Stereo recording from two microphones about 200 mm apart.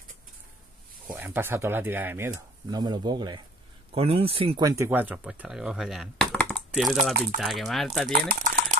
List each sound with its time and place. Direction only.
1.0 s speech: 10° right (ahead or behind)
8.1 s speech: 45° right (ahead or behind)